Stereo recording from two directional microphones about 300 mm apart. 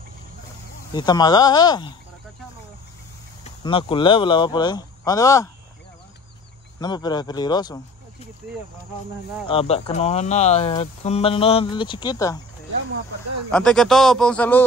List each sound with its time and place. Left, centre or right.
0.9 s speech: centre
3.6 s speech: centre
6.8 s speech: centre
9.5 s speech: centre
13.5 s a man's voice: centre